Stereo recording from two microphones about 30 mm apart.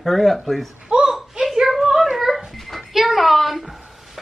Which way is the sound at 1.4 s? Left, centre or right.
Centre.